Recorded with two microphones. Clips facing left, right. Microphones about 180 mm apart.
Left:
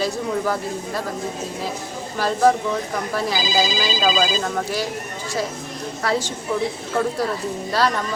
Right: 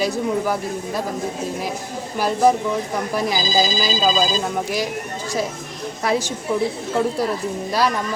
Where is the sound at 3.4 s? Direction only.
45° right (ahead or behind).